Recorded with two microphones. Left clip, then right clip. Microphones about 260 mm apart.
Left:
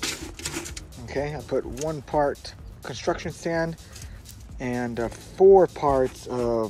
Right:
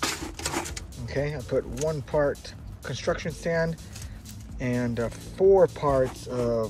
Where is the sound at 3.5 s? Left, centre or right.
Left.